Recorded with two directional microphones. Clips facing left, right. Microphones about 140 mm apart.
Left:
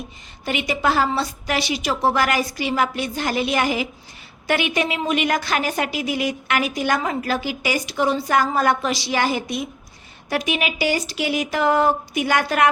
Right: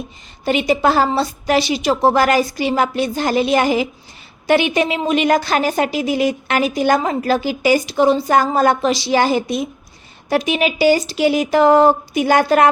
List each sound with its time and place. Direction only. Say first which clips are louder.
0.4 s a woman's voice: right 6 dB; 30° right (ahead or behind)